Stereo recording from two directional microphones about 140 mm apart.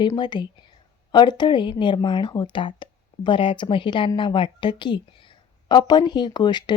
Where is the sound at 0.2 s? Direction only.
35° left (ahead or behind).